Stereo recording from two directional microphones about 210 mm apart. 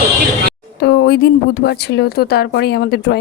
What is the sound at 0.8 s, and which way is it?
Speech, 50° left (ahead or behind).